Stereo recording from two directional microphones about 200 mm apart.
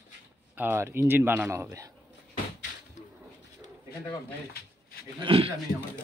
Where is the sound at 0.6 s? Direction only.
10° right (ahead or behind).